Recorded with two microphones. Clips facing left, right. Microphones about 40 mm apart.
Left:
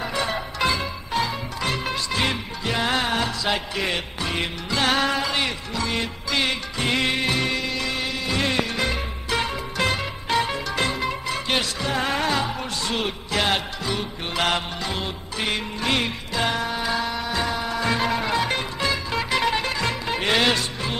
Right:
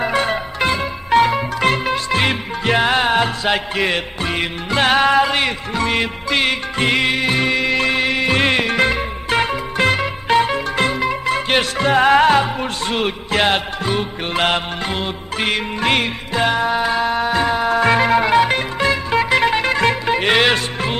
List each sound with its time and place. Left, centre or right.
0.0 s music: right
1.1 s music: right
7.0 s music: right
12.4 s music: right
16.4 s music: right
17.6 s music: right